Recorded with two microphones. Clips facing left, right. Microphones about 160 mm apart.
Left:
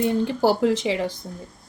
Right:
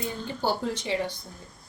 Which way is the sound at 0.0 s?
90° left.